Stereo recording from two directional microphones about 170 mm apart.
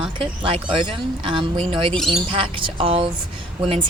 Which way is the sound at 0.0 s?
30° right (ahead or behind).